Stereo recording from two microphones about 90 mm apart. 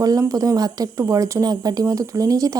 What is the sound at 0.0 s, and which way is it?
Speech, 40° right (ahead or behind).